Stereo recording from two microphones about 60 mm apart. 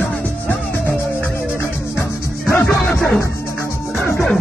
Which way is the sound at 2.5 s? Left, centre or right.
Left.